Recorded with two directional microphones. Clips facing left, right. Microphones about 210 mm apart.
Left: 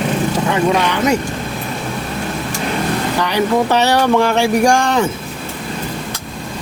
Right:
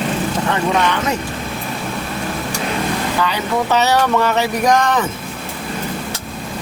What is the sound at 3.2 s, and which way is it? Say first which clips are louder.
Speech: left 6 dB; 15° left (ahead or behind).